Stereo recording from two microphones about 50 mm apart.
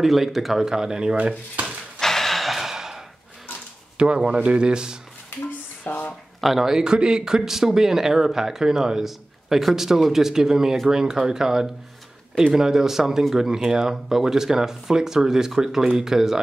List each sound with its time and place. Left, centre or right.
0.0 s speech: centre
2.0 s gasp: centre
4.0 s speech: centre
5.3 s a sound: left
6.4 s speech: centre